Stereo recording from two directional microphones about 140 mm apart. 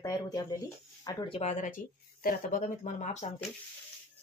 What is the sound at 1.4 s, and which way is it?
Speech, 60° left (ahead or behind).